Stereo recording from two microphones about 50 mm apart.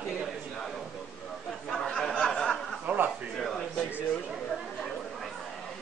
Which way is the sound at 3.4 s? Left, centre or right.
Centre.